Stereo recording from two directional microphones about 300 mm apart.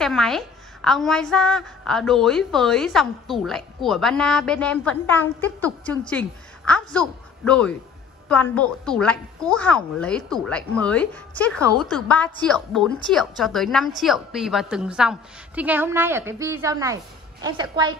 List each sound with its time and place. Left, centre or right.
0.0 s a woman's voice: centre